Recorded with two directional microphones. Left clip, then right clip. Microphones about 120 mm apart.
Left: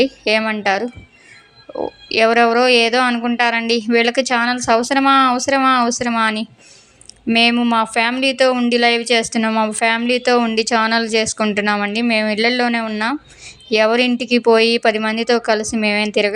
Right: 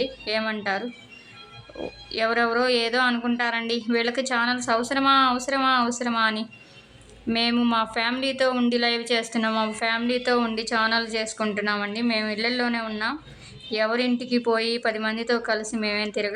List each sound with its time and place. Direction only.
0.0 s speech: 45° left (ahead or behind)
2.1 s a woman's voice: 40° left (ahead or behind)
7.3 s a woman's voice: 30° left (ahead or behind)